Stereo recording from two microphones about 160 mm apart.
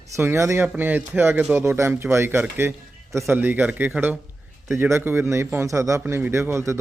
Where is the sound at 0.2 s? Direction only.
15° right (ahead or behind).